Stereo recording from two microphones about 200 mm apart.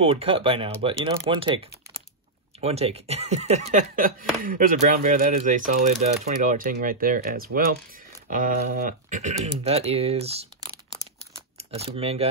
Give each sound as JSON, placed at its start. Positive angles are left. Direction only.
{"t": 0.0, "sound": "speech", "side_deg": -30}